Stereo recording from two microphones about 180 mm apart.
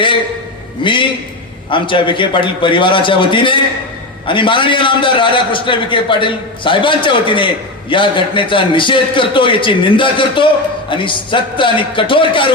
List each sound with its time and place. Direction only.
0.8 s a man's voice: 25° left (ahead or behind)